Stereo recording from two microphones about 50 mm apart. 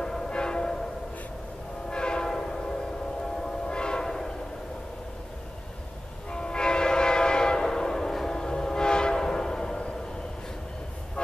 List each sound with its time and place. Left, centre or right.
0.0 s train: centre
1.9 s train horn: centre
3.3 s train: centre
6.3 s train horn: centre
11.2 s vehicle: centre